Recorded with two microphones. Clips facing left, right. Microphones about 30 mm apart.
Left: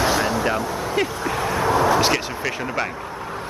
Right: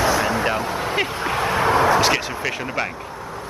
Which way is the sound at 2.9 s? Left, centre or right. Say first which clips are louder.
Left 2 dB; left.